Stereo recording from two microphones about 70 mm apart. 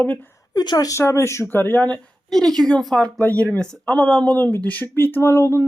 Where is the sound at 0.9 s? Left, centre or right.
Left.